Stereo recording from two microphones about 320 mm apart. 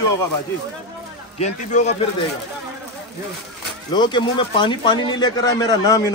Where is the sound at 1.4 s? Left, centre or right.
Left.